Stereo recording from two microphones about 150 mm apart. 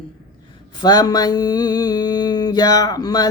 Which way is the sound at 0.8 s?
25° left (ahead or behind).